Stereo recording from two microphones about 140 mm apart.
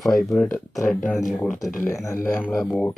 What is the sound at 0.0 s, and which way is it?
Speech, centre (ahead or behind).